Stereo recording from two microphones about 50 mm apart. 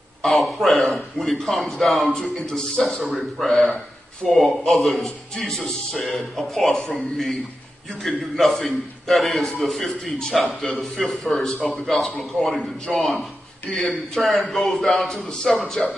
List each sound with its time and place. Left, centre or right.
0.2 s a man's voice: centre
3.4 s a man's voice: centre